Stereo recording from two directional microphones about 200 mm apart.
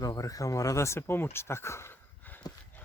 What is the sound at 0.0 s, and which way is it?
Speech, 15° left (ahead or behind).